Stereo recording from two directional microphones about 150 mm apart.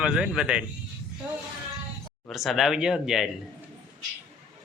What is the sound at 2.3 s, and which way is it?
Speech, centre (ahead or behind).